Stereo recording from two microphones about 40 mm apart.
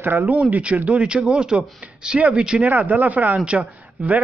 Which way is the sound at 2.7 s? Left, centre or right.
Right.